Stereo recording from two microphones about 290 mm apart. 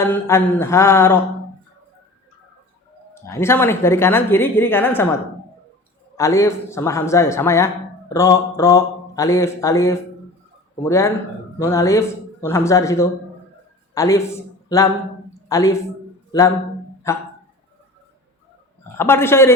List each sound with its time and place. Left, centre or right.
0.0 s speech: centre
3.2 s speech: centre
6.1 s a man's voice: centre
17.1 s speech: centre
18.9 s speech: centre